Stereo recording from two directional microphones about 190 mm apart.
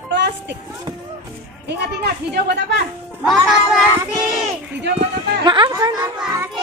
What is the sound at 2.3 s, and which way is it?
Speech, 60° right (ahead or behind).